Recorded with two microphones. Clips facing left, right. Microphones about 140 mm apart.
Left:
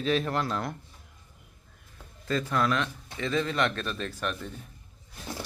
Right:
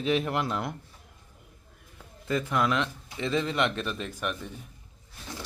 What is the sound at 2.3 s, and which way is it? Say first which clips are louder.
Speech: even; 15° right (ahead or behind).